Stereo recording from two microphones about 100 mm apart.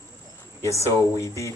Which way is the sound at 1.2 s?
30° left (ahead or behind).